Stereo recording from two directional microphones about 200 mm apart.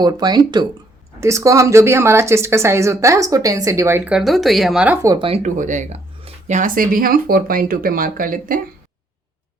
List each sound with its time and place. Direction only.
0.0 s speech: 20° right (ahead or behind); by 4.9 s 5° right (ahead or behind)
5.0 s speech: 25° right (ahead or behind)
5.4 s speech: 40° right (ahead or behind)